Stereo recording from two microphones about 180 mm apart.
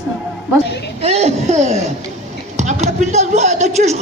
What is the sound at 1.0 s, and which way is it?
Speech, 35° right (ahead or behind).